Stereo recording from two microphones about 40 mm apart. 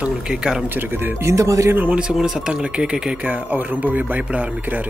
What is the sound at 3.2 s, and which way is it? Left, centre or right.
Speech, right.